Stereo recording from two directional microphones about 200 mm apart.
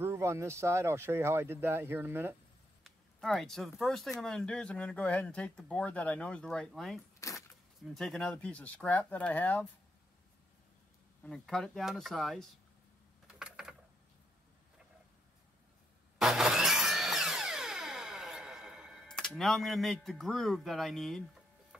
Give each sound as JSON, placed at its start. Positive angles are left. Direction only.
{"t": 0.0, "sound": "speech", "side_deg": -15}
{"t": 2.8, "sound": "speech", "side_deg": 0}
{"t": 7.2, "sound": "a sound", "side_deg": 15}
{"t": 7.9, "sound": "speech", "side_deg": 0}
{"t": 11.2, "sound": "speech", "side_deg": 5}
{"t": 13.3, "sound": "a sound", "side_deg": -5}
{"t": 16.2, "sound": "music", "side_deg": 0}